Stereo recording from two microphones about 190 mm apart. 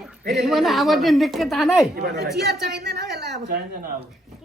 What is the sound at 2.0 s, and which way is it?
A woman's voice, 60° right (ahead or behind).